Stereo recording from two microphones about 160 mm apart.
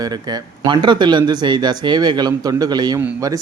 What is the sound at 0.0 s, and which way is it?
Speech, 25° right (ahead or behind).